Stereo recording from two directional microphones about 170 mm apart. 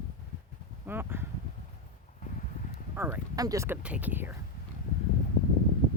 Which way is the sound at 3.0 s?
15° right (ahead or behind).